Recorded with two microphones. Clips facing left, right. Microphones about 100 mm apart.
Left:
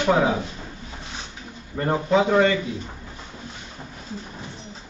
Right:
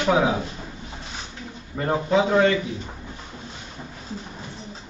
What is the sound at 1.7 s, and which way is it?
Speech, centre (ahead or behind).